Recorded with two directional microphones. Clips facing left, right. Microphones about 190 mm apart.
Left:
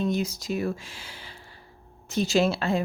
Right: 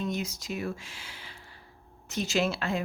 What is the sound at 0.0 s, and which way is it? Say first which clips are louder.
Speech: left 6 dB; 35° left (ahead or behind).